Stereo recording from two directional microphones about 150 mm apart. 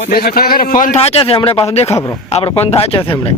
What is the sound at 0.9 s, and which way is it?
Speech, 40° left (ahead or behind).